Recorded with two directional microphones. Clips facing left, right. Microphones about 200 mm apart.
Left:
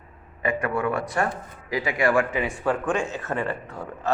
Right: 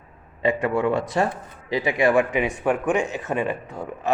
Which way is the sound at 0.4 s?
25° right (ahead or behind).